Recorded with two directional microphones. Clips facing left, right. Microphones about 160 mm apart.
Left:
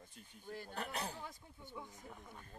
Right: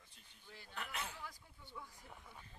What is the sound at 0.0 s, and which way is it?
Speech, 45° left (ahead or behind).